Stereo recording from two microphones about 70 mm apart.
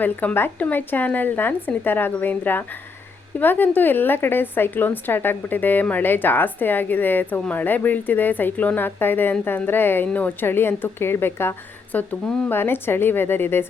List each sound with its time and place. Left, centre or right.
0.0 s a woman's voice: left
11.9 s a woman's voice: left